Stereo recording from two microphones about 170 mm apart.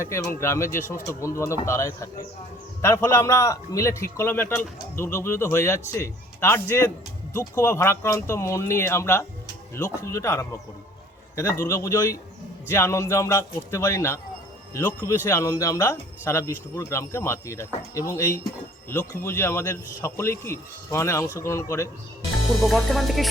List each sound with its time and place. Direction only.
0.0 s a man's voice: 15° left (ahead or behind)
11.6 s a man's voice: 15° left (ahead or behind)
22.6 s music: centre (ahead or behind)